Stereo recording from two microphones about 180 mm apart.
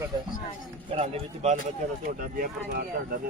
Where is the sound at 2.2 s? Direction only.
55° right (ahead or behind).